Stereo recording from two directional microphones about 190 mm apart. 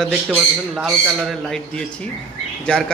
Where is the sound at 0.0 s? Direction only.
Centre (ahead or behind).